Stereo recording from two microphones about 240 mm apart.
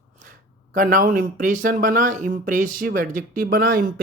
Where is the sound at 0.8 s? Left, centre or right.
Right.